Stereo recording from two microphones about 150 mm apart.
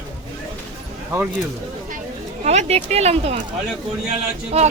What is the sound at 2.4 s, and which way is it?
Speech, 50° right (ahead or behind).